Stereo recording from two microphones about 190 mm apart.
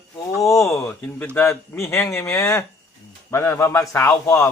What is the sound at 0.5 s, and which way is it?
A man's voice, 15° left (ahead or behind).